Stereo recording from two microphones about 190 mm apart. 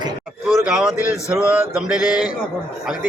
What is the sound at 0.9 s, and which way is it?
A man's voice, 15° left (ahead or behind).